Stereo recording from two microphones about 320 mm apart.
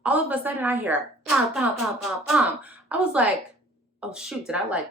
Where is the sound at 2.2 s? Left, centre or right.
Centre.